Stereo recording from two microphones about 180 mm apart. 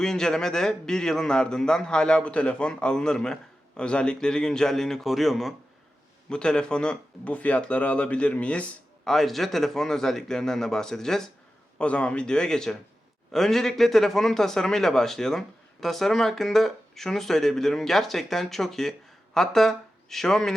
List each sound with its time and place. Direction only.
0.0 s a man's voice: 5° left (ahead or behind)